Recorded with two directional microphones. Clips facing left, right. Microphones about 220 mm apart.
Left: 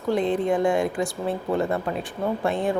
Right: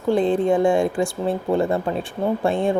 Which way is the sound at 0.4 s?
30° right (ahead or behind).